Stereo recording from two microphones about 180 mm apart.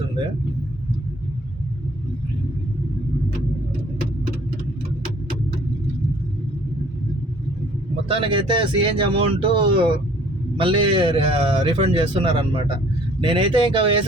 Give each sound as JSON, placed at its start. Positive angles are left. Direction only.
{"t": 8.0, "sound": "speech", "side_deg": -30}